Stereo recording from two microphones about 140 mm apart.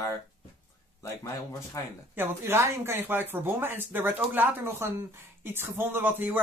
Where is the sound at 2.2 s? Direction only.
15° right (ahead or behind).